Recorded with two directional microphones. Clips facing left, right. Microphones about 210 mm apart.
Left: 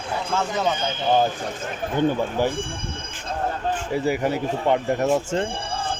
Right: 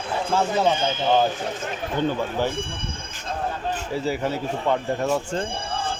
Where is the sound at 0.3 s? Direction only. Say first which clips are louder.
Right 3 dB; 30° right (ahead or behind).